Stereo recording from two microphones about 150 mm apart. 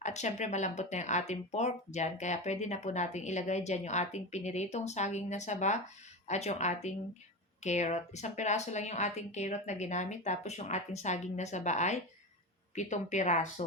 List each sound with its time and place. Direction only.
0.0 s speech: 50° left (ahead or behind)